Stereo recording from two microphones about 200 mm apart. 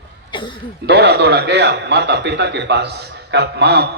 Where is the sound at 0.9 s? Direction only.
55° right (ahead or behind).